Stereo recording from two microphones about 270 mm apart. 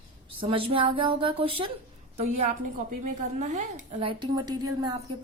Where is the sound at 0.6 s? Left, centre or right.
Centre.